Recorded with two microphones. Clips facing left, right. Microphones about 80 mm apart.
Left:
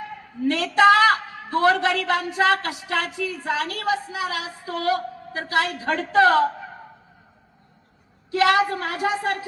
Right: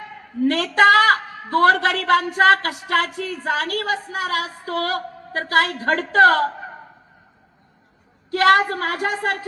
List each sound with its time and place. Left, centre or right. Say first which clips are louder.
0.4 s a man's voice: right 1 dB; right
8.3 s a man's voice: right 3 dB; right